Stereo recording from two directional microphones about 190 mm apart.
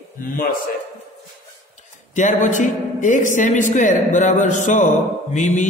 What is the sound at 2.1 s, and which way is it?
Mantra, 40° left (ahead or behind).